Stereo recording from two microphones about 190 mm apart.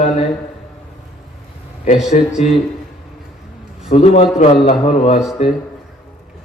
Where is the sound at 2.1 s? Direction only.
35° left (ahead or behind).